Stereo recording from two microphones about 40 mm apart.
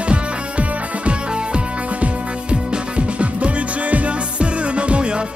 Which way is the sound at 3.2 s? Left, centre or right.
Right.